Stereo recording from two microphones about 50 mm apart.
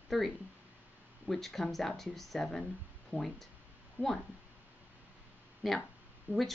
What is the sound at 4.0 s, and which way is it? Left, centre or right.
Speech, right.